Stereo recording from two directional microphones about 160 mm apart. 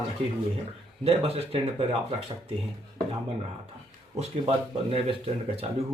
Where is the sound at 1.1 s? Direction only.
40° right (ahead or behind).